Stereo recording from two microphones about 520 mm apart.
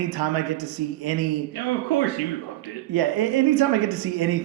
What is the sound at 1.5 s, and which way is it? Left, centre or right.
Speech, left.